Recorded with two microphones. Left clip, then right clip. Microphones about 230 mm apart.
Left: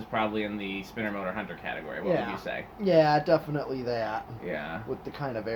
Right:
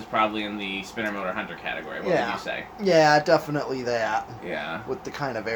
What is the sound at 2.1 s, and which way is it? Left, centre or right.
Speech, centre.